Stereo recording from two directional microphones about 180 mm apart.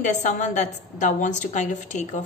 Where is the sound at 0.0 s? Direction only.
40° left (ahead or behind).